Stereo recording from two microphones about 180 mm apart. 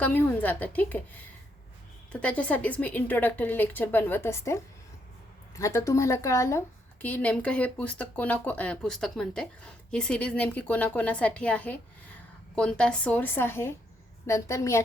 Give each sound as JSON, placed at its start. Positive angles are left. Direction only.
{"t": 0.0, "sound": "a woman's voice", "side_deg": 10}
{"t": 2.2, "sound": "a woman's voice", "side_deg": 5}